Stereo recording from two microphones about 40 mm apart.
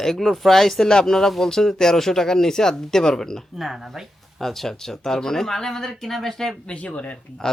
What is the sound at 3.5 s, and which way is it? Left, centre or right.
Speech, centre.